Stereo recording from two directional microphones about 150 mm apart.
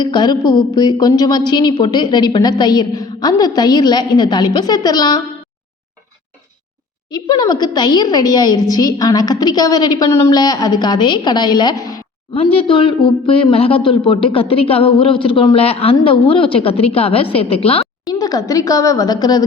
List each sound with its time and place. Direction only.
0.0 s a woman's voice: 30° left (ahead or behind)
7.1 s a woman's voice: 25° left (ahead or behind)
12.3 s speech: 40° left (ahead or behind)
18.1 s a woman's voice: 25° left (ahead or behind)